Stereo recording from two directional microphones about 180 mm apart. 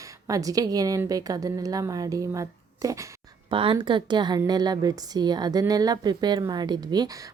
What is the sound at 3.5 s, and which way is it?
A woman's voice, 30° right (ahead or behind).